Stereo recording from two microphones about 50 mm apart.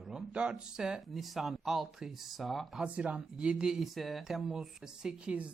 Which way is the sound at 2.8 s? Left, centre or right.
Right.